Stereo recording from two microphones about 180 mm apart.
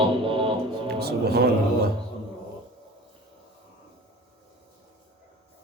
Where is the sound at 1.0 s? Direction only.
65° right (ahead or behind).